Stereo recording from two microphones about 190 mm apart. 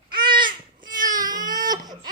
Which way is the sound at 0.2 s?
25° right (ahead or behind).